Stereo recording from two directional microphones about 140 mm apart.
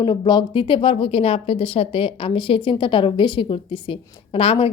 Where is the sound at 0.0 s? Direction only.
30° left (ahead or behind).